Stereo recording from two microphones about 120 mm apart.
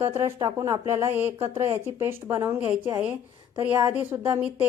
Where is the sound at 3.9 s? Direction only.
15° right (ahead or behind).